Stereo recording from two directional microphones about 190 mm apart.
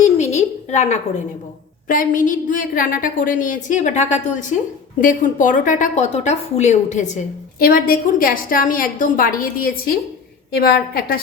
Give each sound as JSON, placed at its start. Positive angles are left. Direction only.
{"t": 0.0, "sound": "a sound", "side_deg": 35}
{"t": 1.9, "sound": "a woman's voice", "side_deg": 45}
{"t": 7.6, "sound": "a woman's voice", "side_deg": 50}